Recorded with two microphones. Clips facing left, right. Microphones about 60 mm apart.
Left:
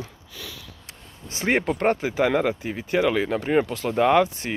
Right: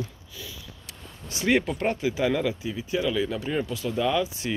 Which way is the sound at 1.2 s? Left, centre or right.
Left.